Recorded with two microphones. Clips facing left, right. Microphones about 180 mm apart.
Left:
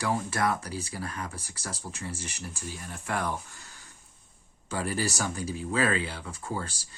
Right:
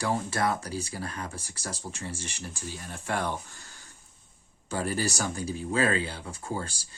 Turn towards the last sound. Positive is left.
turn(degrees=-30)  # may be behind; listen again after turning